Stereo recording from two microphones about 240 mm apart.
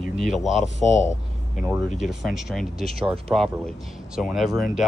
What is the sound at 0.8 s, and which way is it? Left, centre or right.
Speech, left.